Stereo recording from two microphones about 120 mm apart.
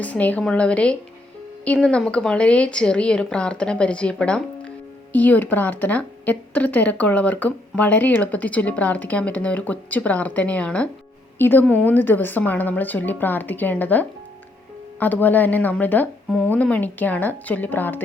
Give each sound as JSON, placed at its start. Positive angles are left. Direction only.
{"t": 0.0, "sound": "a woman's voice", "side_deg": 10}